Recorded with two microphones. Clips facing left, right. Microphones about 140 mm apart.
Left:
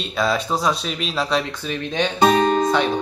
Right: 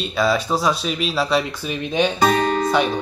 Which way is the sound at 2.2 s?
25° left (ahead or behind).